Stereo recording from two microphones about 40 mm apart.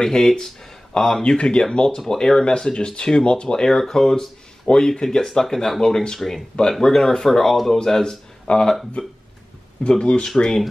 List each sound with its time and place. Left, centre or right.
0.0 s speech: centre
4.6 s speech: centre
8.5 s speech: left